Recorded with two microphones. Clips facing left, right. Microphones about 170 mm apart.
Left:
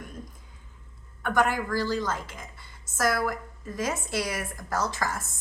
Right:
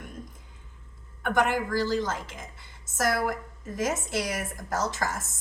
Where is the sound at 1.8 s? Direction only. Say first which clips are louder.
Right 1 dB; 45° right (ahead or behind).